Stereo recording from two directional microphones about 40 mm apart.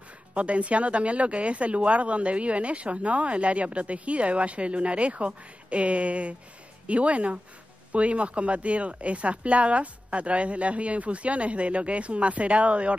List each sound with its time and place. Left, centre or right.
0.3 s speech: right